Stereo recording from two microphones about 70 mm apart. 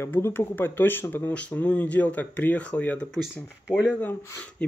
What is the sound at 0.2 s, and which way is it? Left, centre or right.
Speech, left.